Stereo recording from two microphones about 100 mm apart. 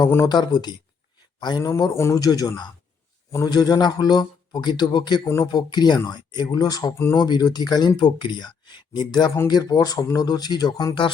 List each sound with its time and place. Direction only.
0.3 s speech: 45° left (ahead or behind)
1.7 s speech: 30° left (ahead or behind); by 5.2 s 50° left (ahead or behind)
5.2 s speech: 30° left (ahead or behind)
5.5 s speech: 45° left (ahead or behind)
6.9 s speech: 25° left (ahead or behind)
7.2 s speech: 45° left (ahead or behind)